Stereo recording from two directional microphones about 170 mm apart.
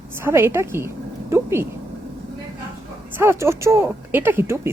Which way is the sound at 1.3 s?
15° right (ahead or behind).